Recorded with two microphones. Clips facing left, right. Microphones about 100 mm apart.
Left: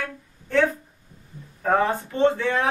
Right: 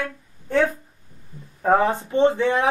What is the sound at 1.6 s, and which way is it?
Speech, 20° right (ahead or behind).